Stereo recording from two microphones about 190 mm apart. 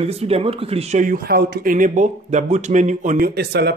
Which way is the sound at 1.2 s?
55° right (ahead or behind).